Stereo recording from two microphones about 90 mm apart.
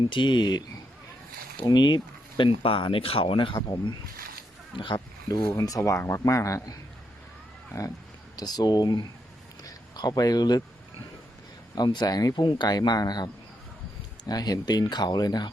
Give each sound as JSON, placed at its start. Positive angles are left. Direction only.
{"t": 0.1, "sound": "speech", "side_deg": 60}
{"t": 1.6, "sound": "speech", "side_deg": 55}
{"t": 2.4, "sound": "speech", "side_deg": 70}
{"t": 3.5, "sound": "speech", "side_deg": 55}
{"t": 4.8, "sound": "speech", "side_deg": 65}
{"t": 5.5, "sound": "speech", "side_deg": 40}
{"t": 8.4, "sound": "speech", "side_deg": 45}
{"t": 9.6, "sound": "a sound", "side_deg": 50}
{"t": 11.9, "sound": "speech", "side_deg": 45}